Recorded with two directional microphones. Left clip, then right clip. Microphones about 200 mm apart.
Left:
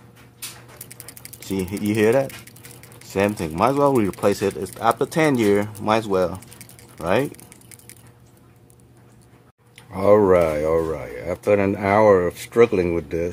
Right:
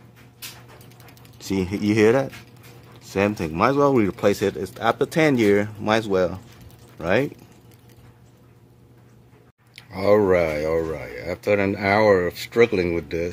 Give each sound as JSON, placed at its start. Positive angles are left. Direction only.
{"t": 1.5, "sound": "speech", "side_deg": -15}
{"t": 9.8, "sound": "speech", "side_deg": 5}